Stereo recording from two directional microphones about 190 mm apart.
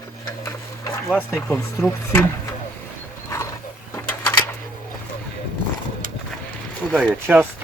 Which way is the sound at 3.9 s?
5° left (ahead or behind).